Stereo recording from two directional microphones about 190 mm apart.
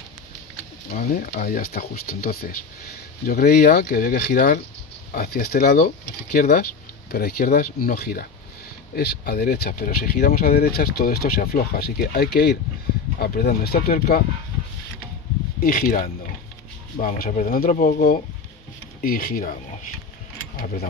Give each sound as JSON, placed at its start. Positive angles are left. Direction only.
{"t": 0.8, "sound": "speech", "side_deg": 45}
{"t": 15.6, "sound": "speech", "side_deg": 50}